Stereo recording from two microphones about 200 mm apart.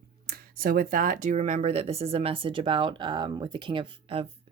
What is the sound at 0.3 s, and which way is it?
Speech, 45° right (ahead or behind).